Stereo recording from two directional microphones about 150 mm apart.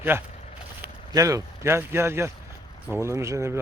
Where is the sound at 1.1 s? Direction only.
20° right (ahead or behind).